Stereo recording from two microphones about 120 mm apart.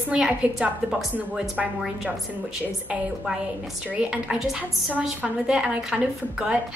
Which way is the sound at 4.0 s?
10° right (ahead or behind).